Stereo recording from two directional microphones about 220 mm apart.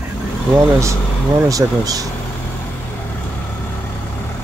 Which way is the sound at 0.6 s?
15° right (ahead or behind).